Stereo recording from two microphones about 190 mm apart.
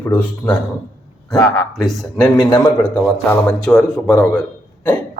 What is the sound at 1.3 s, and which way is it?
Speech, 20° left (ahead or behind).